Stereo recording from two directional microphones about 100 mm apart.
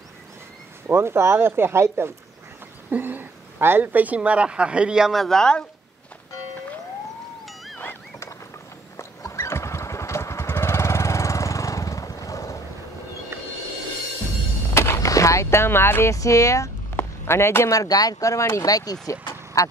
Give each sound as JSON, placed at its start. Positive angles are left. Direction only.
{"t": 0.8, "sound": "a woman's voice", "side_deg": -25}
{"t": 7.4, "sound": "wild animals", "side_deg": 0}
{"t": 7.8, "sound": "a sound", "side_deg": 25}
{"t": 8.9, "sound": "motorcycle", "side_deg": 30}
{"t": 13.3, "sound": "music", "side_deg": -30}
{"t": 14.7, "sound": "speech", "side_deg": 25}